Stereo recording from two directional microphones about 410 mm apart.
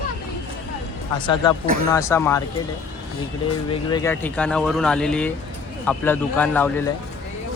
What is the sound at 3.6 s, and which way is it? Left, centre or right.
Speech, centre.